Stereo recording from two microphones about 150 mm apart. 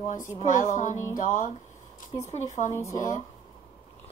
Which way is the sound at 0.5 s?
55° left (ahead or behind).